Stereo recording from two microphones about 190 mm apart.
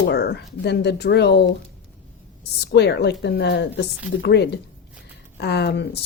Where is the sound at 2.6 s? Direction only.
60° left (ahead or behind).